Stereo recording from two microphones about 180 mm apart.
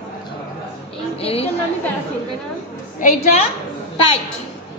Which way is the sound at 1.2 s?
35° left (ahead or behind).